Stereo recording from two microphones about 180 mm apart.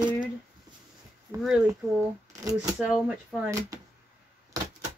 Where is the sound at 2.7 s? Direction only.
5° right (ahead or behind).